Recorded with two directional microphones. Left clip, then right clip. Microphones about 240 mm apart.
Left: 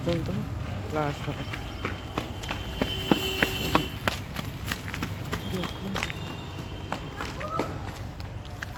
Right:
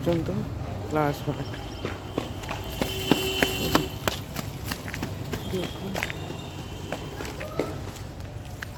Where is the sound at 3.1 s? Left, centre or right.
Right.